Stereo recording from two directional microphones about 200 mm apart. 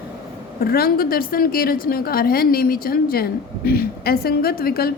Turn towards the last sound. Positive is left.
turn(degrees=50)  # may be behind; listen again after turning